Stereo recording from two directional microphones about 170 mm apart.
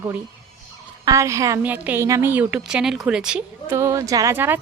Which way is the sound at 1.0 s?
20° right (ahead or behind).